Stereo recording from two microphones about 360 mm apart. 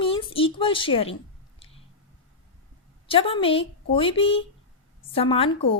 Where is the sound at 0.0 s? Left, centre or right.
Centre.